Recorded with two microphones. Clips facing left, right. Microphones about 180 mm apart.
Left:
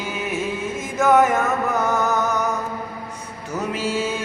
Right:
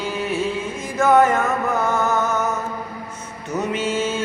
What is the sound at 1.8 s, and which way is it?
Music, 20° left (ahead or behind).